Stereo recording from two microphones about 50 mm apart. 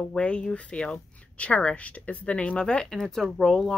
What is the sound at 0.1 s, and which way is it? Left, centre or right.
Speech, centre.